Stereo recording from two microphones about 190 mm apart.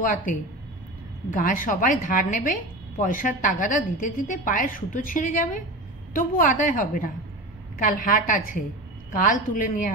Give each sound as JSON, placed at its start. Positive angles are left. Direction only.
{"t": 0.0, "sound": "a woman's voice", "side_deg": 40}
{"t": 1.3, "sound": "a woman's voice", "side_deg": 45}